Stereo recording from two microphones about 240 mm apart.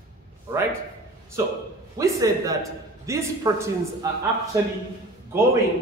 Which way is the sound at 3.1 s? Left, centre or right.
Centre.